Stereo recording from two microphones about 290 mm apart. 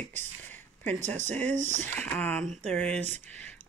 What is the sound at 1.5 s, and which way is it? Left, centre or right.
Speech, right.